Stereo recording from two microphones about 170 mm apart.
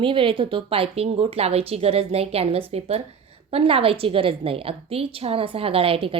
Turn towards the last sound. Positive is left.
turn(degrees=-30)  # may be behind; listen again after turning